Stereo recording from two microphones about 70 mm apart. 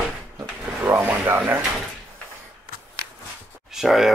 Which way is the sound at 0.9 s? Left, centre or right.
Right.